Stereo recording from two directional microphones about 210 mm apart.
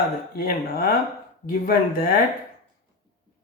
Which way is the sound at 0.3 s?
45° left (ahead or behind).